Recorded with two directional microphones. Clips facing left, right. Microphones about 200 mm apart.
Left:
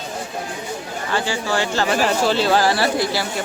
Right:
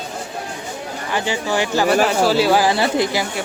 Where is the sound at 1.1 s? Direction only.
15° right (ahead or behind).